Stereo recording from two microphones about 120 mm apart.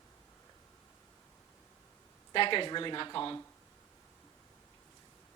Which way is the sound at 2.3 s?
45° left (ahead or behind).